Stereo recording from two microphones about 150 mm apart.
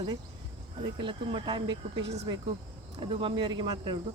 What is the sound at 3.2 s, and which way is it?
Speech, 35° right (ahead or behind).